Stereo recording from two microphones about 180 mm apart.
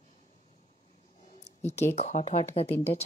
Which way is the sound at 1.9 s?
35° left (ahead or behind).